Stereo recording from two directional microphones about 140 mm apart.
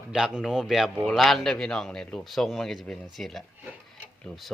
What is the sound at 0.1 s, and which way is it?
Speech, 5° right (ahead or behind).